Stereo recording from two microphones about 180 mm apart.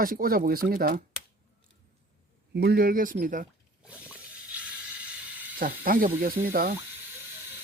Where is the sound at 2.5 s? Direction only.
60° right (ahead or behind).